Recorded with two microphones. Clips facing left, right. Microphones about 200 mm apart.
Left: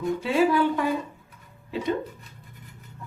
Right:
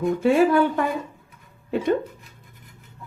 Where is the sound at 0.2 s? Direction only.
50° right (ahead or behind).